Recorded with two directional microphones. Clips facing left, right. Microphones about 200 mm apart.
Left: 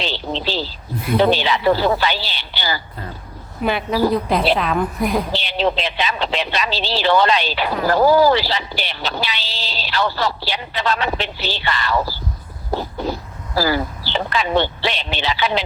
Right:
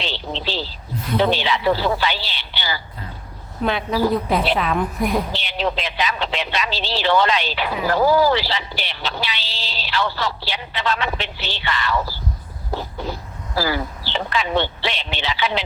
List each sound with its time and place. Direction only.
0.0 s a sound: 40° left (ahead or behind)
1.2 s speech: 40° left (ahead or behind)
3.6 s a woman's voice: 5° left (ahead or behind)
5.3 s speech: 30° left (ahead or behind)